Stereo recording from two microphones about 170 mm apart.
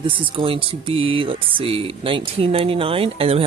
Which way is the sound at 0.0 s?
30° right (ahead or behind).